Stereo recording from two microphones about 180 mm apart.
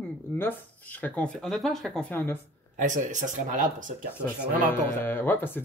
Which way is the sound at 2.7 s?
45° right (ahead or behind).